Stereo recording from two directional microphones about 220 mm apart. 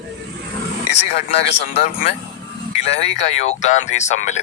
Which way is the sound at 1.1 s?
30° left (ahead or behind).